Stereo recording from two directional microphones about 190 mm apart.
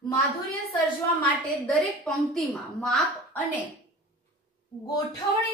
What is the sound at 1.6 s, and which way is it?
A woman's voice, centre (ahead or behind).